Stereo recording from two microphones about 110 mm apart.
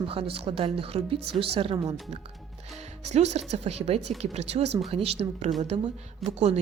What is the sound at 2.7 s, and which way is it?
Speech, 85° right.